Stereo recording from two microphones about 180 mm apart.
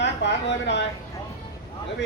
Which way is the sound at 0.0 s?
75° left (ahead or behind).